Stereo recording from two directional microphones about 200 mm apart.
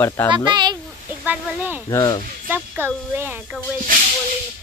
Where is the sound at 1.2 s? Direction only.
10° right (ahead or behind).